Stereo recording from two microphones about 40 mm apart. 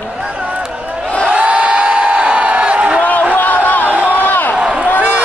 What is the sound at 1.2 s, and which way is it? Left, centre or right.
Crowd, right.